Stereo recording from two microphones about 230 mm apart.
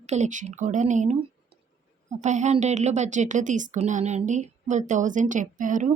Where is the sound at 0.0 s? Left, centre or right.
Right.